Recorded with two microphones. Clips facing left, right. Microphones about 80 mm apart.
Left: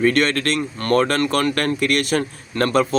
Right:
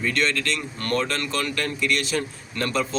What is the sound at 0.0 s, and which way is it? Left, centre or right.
Speech, left.